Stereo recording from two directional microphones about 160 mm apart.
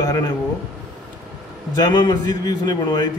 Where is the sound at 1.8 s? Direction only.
30° left (ahead or behind).